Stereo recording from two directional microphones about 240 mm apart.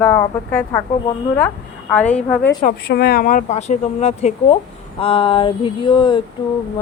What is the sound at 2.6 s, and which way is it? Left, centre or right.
Speech, left.